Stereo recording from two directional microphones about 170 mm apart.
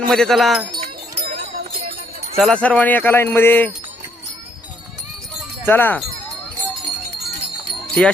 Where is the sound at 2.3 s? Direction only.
5° left (ahead or behind).